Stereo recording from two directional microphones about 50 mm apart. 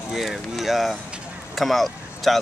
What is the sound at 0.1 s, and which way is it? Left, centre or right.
Speech, centre.